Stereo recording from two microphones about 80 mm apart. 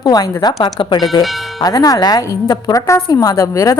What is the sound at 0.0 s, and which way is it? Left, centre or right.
Speech, left.